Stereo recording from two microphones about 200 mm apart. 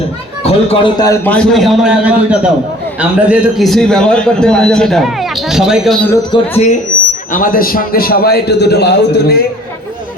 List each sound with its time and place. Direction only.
0.4 s a man's voice: 25° left (ahead or behind); by 6.0 s centre (ahead or behind)
6.3 s speech: 25° left (ahead or behind)
7.3 s a man's voice: 45° left (ahead or behind)